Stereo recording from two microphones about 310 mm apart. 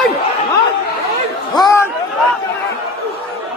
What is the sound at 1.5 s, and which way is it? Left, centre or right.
Chatter, centre.